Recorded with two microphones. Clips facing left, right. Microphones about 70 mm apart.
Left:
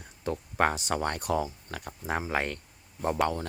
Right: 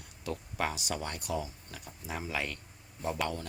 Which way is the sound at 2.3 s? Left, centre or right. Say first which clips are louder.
Left 6 dB; left.